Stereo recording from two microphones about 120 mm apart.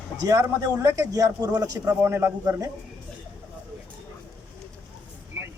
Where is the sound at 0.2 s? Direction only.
30° right (ahead or behind).